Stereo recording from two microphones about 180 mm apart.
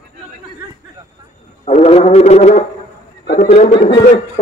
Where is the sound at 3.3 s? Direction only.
40° left (ahead or behind).